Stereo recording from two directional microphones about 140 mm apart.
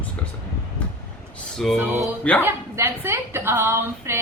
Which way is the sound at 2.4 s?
15° right (ahead or behind).